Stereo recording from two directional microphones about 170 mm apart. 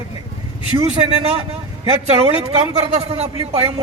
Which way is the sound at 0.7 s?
35° right (ahead or behind).